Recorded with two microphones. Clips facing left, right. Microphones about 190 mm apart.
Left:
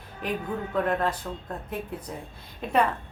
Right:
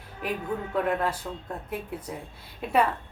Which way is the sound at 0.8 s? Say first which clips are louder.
Left 1 dB; 10° right (ahead or behind).